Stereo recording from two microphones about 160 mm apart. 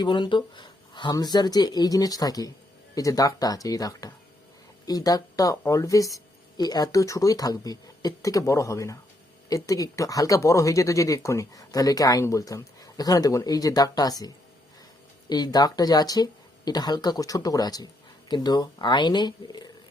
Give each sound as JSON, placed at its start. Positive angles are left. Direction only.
{"t": 0.0, "sound": "speech", "side_deg": 30}